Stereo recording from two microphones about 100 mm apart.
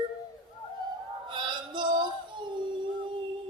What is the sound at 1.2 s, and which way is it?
Music, 50° right (ahead or behind).